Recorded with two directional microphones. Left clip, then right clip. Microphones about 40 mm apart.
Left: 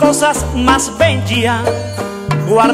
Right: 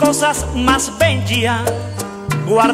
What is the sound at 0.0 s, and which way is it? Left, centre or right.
Music, right.